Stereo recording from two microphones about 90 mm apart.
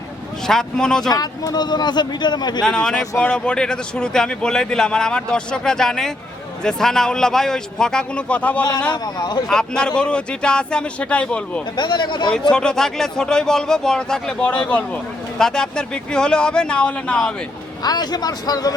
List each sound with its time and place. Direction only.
0.4 s a man's voice: 5° left (ahead or behind)
1.1 s speech: 45° left (ahead or behind)
2.6 s speech: 5° left (ahead or behind)
8.9 s speech: 50° left (ahead or behind)
9.5 s speech: 10° left (ahead or behind)
11.8 s speech: 55° left (ahead or behind)
12.3 s speech: 10° left (ahead or behind)
17.8 s speech: 50° left (ahead or behind)